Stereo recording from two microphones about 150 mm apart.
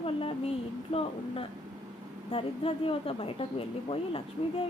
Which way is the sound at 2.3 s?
40° left (ahead or behind).